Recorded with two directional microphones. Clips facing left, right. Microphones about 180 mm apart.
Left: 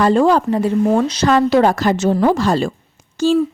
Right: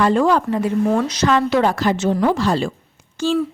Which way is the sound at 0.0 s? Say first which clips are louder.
Left 3 dB; 35° left (ahead or behind).